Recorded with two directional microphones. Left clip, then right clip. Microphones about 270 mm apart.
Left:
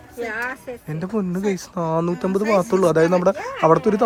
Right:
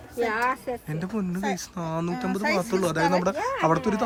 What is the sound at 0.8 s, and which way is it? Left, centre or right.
A man's voice, centre.